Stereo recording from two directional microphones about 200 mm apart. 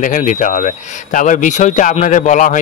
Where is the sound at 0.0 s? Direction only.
40° left (ahead or behind).